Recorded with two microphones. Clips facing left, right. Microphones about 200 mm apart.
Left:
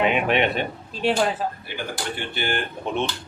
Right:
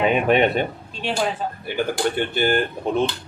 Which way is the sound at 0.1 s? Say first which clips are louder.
Right 4 dB; 40° right (ahead or behind).